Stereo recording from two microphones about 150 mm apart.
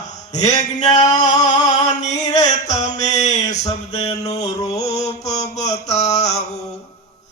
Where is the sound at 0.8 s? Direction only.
50° left (ahead or behind).